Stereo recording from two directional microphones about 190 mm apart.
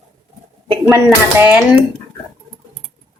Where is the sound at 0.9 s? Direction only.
10° right (ahead or behind).